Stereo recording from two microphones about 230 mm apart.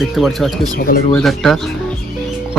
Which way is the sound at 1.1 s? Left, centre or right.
Centre.